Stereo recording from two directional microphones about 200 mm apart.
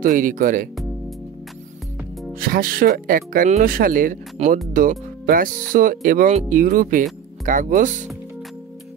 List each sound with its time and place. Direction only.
0.0 s speech: 40° right (ahead or behind)
2.3 s speech: 45° right (ahead or behind)